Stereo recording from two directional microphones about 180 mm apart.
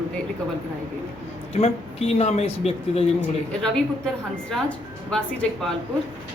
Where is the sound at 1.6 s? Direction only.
35° left (ahead or behind).